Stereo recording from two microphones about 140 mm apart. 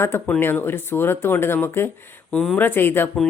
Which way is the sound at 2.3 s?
5° left (ahead or behind).